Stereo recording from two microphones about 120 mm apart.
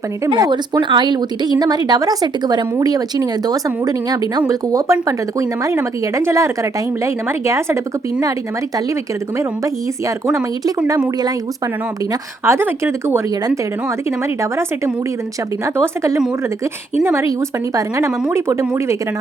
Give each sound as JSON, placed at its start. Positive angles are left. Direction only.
{"t": 0.3, "sound": "speech", "side_deg": -40}
{"t": 10.8, "sound": "speech", "side_deg": -30}
{"t": 12.5, "sound": "speech", "side_deg": -20}
{"t": 17.0, "sound": "speech", "side_deg": -20}